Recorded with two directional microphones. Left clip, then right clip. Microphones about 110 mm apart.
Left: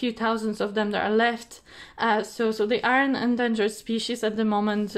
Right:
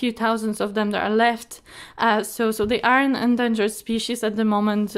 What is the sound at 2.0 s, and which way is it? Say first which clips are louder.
A woman's voice: right 3 dB; 55° right (ahead or behind).